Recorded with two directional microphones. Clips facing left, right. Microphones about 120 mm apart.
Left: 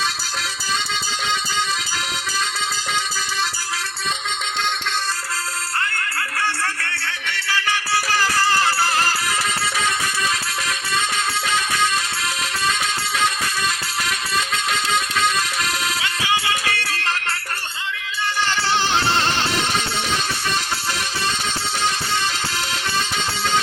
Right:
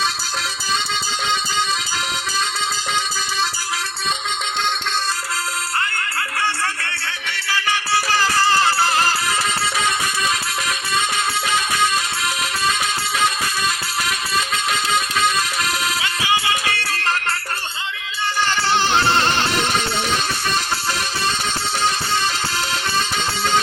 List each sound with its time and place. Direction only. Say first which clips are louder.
6.8 s music: even; 15° right (ahead or behind)
7.3 s music: even; 5° right (ahead or behind)
7.7 s music: right 3 dB; 25° right (ahead or behind)
11.4 s music: right 1 dB; 10° right (ahead or behind)
14.3 s music: right 1 dB; 5° right (ahead or behind)
16.7 s music: right 2 dB; 40° right (ahead or behind)
18.3 s music: right 2 dB; 45° right (ahead or behind)